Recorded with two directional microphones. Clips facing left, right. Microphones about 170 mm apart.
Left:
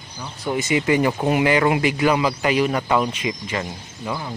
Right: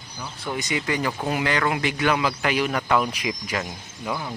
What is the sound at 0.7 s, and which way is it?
Speech, 15° left (ahead or behind).